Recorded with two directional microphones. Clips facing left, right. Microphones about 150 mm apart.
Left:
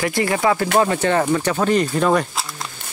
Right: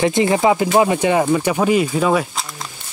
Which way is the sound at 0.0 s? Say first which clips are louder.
Right 4 dB; 20° right (ahead or behind).